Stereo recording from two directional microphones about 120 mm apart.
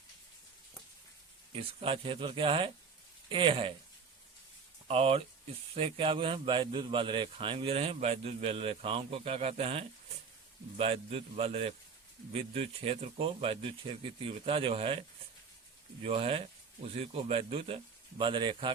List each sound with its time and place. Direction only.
1.5 s speech: 50° right (ahead or behind)
4.9 s a man's voice: 55° right (ahead or behind)
16.0 s a man's voice: 55° right (ahead or behind)